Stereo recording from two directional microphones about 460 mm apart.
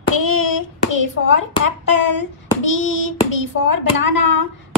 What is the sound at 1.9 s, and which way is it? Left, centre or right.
Speech, left.